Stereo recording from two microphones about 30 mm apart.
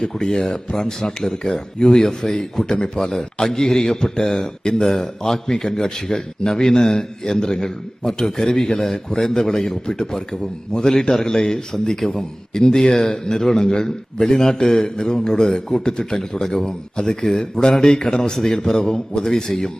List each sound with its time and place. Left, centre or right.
0.0 s speech: centre
3.0 s speech: centre
3.8 s speech: left